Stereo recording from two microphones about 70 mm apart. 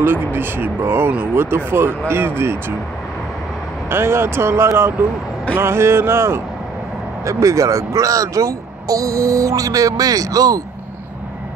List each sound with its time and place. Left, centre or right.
0.0 s speech: right
3.9 s speech: right
7.2 s speech: right